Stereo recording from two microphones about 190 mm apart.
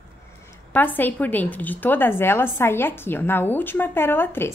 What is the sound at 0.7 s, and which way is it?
Speech, 10° left (ahead or behind).